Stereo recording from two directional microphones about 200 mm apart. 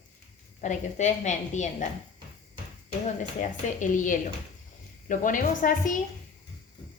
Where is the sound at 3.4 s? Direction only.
40° left (ahead or behind).